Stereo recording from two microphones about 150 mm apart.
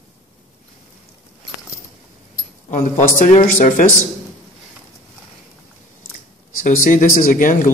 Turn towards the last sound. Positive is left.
turn(degrees=65)  # may be behind; listen again after turning